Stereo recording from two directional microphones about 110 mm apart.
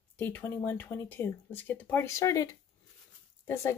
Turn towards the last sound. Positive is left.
turn(degrees=25)  # may be behind; listen again after turning